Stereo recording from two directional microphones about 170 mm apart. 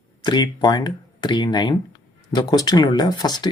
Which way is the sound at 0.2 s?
25° left (ahead or behind).